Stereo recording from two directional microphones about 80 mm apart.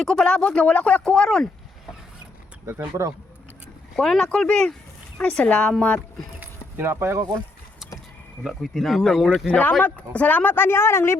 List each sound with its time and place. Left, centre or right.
0.0 s speech: centre
3.9 s speech: centre
6.4 s a sound: right
8.4 s speech: centre
9.5 s a woman's voice: left